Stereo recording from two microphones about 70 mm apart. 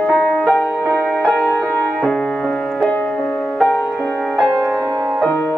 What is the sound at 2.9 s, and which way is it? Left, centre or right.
Music, left.